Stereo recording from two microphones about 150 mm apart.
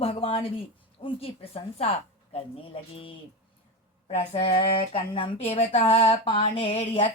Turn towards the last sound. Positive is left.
turn(degrees=40)  # may be behind; listen again after turning